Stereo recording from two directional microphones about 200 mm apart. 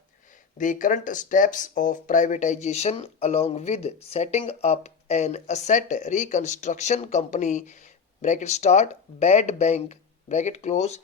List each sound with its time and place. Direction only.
0.6 s speech: 40° left (ahead or behind)